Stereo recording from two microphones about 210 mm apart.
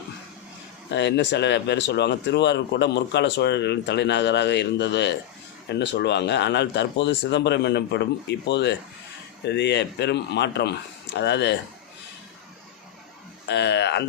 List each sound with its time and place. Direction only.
0.9 s speech: 55° left (ahead or behind)
13.5 s speech: 55° left (ahead or behind)